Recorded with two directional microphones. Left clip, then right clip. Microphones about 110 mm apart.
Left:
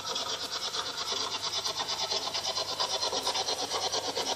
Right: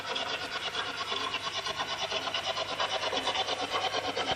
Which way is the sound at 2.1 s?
15° left (ahead or behind).